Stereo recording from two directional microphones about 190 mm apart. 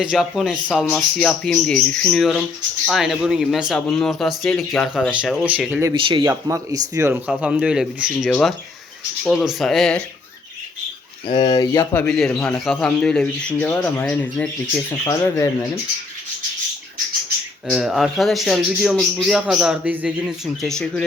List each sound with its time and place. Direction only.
0.0 s a man's voice: centre (ahead or behind)
5.9 s a man's voice: 25° right (ahead or behind); by 10.0 s centre (ahead or behind)
11.3 s speech: 20° left (ahead or behind)
11.9 s a man's voice: 5° left (ahead or behind)
17.7 s a man's voice: 5° right (ahead or behind)